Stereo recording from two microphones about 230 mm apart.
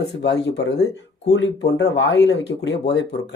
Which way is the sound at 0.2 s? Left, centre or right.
Left.